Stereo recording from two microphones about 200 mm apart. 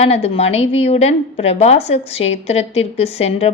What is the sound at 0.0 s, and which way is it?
A woman's voice, 30° left (ahead or behind).